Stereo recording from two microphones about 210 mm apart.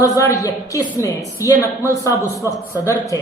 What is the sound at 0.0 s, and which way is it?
A man's voice, 15° left (ahead or behind).